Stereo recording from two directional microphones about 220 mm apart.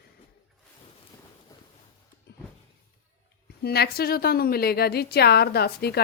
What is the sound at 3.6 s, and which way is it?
A woman's voice, 45° left (ahead or behind).